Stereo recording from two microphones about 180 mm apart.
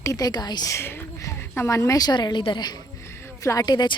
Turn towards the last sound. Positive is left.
turn(degrees=25)  # may be behind; listen again after turning